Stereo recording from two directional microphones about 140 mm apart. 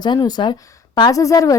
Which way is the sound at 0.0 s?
30° left (ahead or behind).